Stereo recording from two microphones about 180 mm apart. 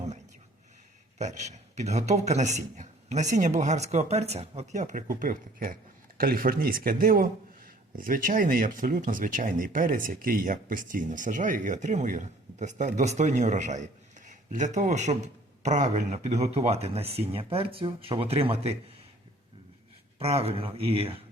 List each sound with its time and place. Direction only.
1.2 s a man's voice: 40° right (ahead or behind)
20.1 s a man's voice: 35° right (ahead or behind)